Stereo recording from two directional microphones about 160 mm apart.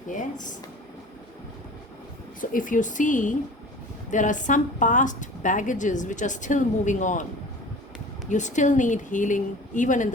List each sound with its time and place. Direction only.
2.4 s a woman's voice: 60° left (ahead or behind)
8.3 s a woman's voice: 50° left (ahead or behind)